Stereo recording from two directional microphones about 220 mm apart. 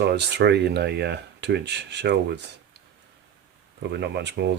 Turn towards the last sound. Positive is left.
turn(degrees=-50)  # may be behind; listen again after turning